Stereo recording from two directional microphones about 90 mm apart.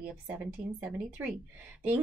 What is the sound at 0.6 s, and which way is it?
Speech, 15° right (ahead or behind).